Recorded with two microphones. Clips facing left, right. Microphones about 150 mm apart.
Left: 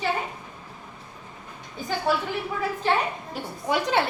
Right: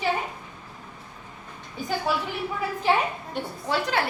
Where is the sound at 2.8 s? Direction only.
10° right (ahead or behind).